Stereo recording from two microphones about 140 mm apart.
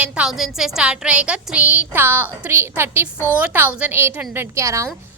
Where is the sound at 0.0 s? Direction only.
5° right (ahead or behind).